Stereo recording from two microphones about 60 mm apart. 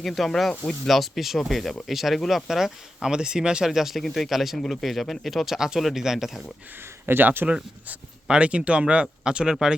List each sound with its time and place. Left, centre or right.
0.0 s speech: centre
7.0 s speech: right
7.4 s speech: centre